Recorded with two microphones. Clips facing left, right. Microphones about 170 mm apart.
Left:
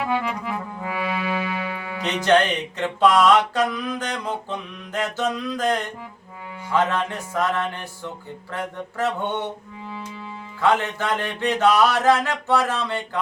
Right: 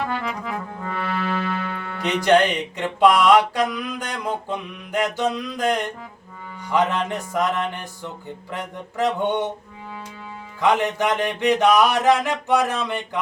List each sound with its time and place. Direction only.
0.0 s music: 10° left (ahead or behind)
2.2 s music: 10° right (ahead or behind)
8.5 s a sound: 20° right (ahead or behind)
10.6 s music: 15° right (ahead or behind)